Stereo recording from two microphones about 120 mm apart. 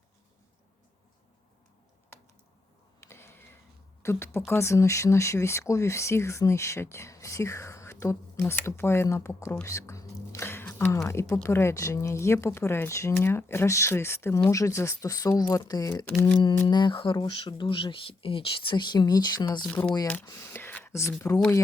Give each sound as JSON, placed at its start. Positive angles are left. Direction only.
{"t": 3.0, "sound": "a sound", "side_deg": 20}
{"t": 4.0, "sound": "speech", "side_deg": 20}
{"t": 9.6, "sound": "whispering", "side_deg": 25}
{"t": 10.8, "sound": "speech", "side_deg": 25}
{"t": 20.2, "sound": "speech", "side_deg": 20}